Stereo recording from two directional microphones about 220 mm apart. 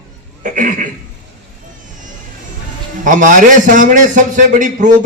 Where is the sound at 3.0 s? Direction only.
35° right (ahead or behind).